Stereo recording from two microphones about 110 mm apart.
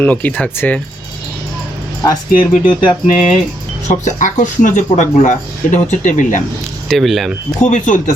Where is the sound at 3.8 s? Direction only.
90° left.